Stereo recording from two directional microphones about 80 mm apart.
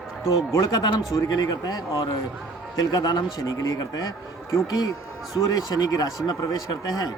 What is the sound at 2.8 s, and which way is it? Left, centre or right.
A man's voice, left.